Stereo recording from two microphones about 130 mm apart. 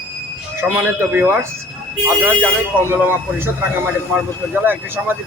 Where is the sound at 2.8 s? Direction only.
15° right (ahead or behind).